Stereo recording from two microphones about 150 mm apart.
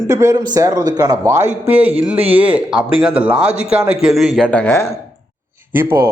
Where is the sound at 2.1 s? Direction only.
40° right (ahead or behind).